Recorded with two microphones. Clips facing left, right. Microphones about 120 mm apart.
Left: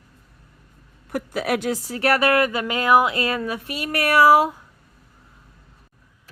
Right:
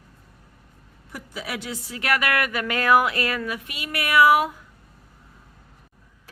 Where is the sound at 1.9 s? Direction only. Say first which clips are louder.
Left 5 dB; 35° left (ahead or behind).